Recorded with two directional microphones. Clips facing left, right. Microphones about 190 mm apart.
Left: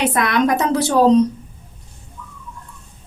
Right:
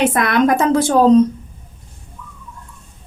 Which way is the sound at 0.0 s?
50° right (ahead or behind).